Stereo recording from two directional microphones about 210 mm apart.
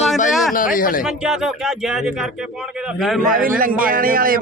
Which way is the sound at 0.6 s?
40° left (ahead or behind).